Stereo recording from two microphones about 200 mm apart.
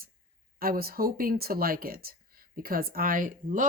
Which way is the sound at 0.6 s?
50° right (ahead or behind).